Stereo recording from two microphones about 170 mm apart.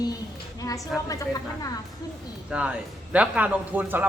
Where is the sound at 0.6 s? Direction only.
20° left (ahead or behind).